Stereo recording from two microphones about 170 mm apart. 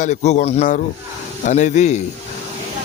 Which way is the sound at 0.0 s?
45° left (ahead or behind).